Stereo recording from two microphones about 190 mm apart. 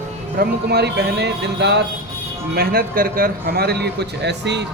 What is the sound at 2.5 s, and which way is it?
A man's voice, 55° right (ahead or behind).